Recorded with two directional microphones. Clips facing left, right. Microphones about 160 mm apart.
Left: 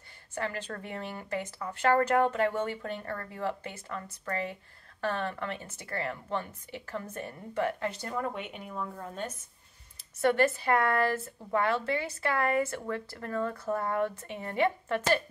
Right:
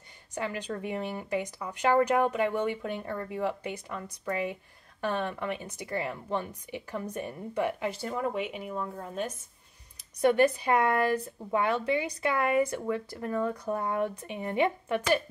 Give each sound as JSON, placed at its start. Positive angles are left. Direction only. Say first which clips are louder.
{"t": 0.3, "sound": "speech", "louder": "right 2 dB", "side_deg": -15}
{"t": 10.2, "sound": "speech", "louder": "right 2 dB", "side_deg": -15}